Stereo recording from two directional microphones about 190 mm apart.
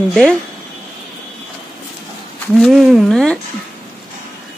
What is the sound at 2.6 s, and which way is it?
Speech, centre (ahead or behind).